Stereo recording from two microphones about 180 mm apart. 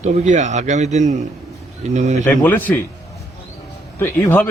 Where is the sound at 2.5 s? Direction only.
10° left (ahead or behind).